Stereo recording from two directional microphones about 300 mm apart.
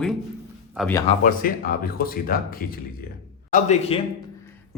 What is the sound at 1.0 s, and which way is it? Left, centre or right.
Speech, left.